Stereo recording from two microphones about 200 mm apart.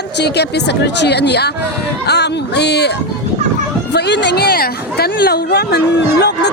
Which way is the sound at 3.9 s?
60° left (ahead or behind).